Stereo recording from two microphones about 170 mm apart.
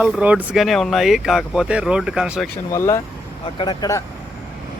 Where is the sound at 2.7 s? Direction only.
15° left (ahead or behind).